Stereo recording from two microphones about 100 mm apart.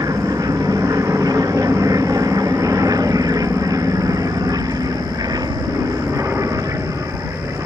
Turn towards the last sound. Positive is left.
turn(degrees=-35)  # may be behind; listen again after turning